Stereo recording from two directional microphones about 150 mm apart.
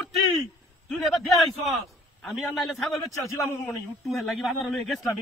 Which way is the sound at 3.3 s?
20° left (ahead or behind).